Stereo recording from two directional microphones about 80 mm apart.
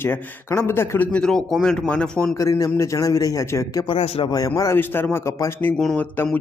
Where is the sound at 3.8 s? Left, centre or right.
Left.